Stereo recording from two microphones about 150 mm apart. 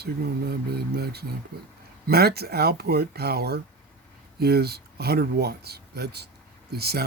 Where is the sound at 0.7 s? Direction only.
90° right.